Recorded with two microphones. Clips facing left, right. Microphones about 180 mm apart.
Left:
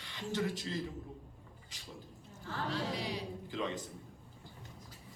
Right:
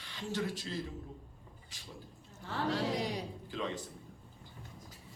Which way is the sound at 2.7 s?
45° right (ahead or behind).